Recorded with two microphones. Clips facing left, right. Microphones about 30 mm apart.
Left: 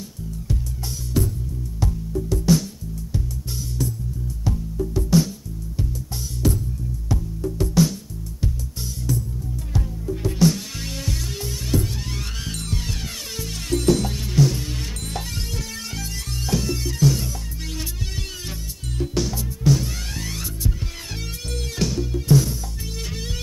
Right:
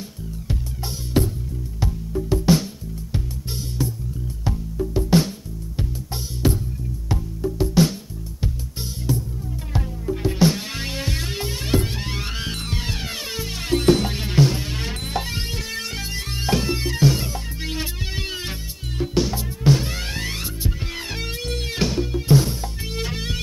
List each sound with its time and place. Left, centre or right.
1.1 s music: right
4.5 s music: right
6.4 s music: right
7.8 s music: right
9.8 s music: right
18.9 s music: right